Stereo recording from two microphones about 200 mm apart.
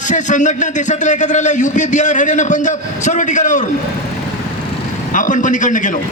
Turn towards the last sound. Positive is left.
turn(degrees=40)  # may be behind; listen again after turning